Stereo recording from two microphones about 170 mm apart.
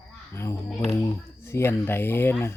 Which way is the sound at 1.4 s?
15° left (ahead or behind).